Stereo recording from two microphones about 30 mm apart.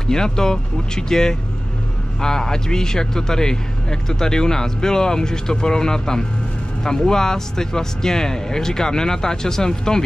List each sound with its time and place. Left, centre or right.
0.0 s a man's voice: left